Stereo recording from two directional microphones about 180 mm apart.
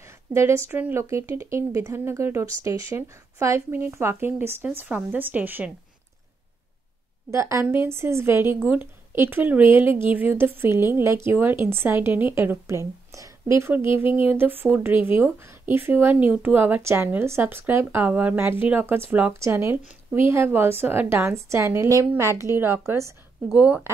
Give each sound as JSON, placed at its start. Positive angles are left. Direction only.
{"t": 0.3, "sound": "a woman's voice", "side_deg": -15}
{"t": 7.2, "sound": "a woman's voice", "side_deg": -15}